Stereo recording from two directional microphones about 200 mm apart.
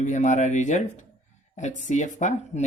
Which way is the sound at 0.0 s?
35° left (ahead or behind).